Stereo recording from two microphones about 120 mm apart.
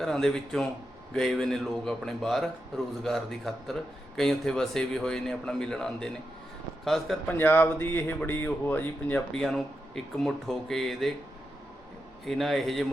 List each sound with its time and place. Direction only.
0.0 s speech: 5° left (ahead or behind)
7.3 s speech: 15° left (ahead or behind)
9.4 s speech: centre (ahead or behind)
12.2 s speech: centre (ahead or behind)